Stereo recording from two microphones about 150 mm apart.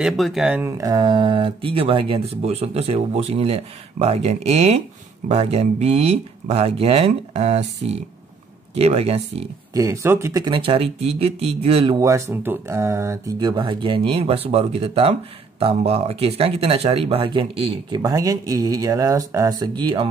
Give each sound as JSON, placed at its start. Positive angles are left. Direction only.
{"t": 0.0, "sound": "speech", "side_deg": 0}
{"t": 0.6, "sound": "speech", "side_deg": -20}
{"t": 9.8, "sound": "speech", "side_deg": -20}
{"t": 10.5, "sound": "speech", "side_deg": -40}
{"t": 12.0, "sound": "speech", "side_deg": -20}